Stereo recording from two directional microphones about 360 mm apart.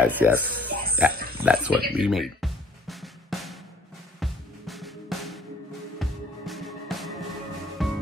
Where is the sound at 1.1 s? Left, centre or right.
Right.